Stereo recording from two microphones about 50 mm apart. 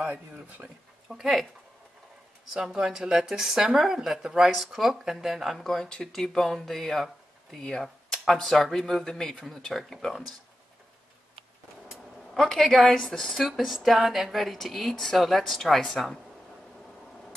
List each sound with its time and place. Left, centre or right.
0.0 s speech: right
1.0 s speech: centre
2.5 s a woman's voice: centre
5.9 s speech: centre
11.9 s a sound: centre
13.0 s a woman's voice: centre